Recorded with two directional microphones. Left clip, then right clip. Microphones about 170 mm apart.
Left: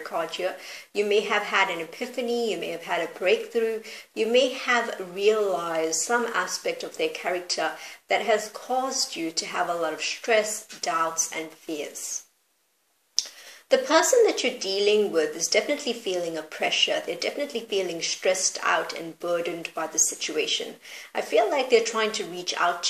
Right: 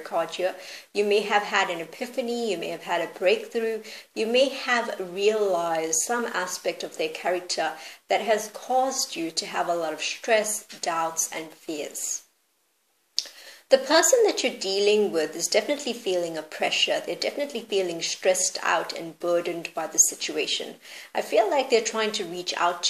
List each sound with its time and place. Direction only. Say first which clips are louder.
0.1 s a woman's voice: right 3 dB; 35° right (ahead or behind)
13.7 s a woman's voice: right 1 dB; 35° right (ahead or behind)